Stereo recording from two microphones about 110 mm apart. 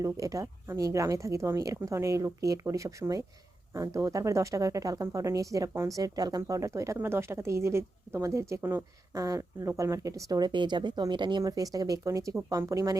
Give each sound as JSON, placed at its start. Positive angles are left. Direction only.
{"t": 0.0, "sound": "a woman's voice", "side_deg": -30}